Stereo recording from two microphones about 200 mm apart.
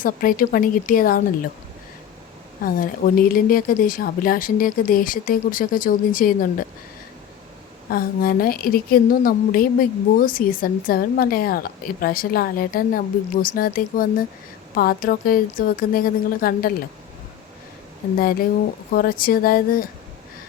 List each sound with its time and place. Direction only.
0.0 s speech: 45° left (ahead or behind)
2.6 s speech: 45° left (ahead or behind)
7.9 s speech: 45° left (ahead or behind)
18.2 s speech: 45° left (ahead or behind)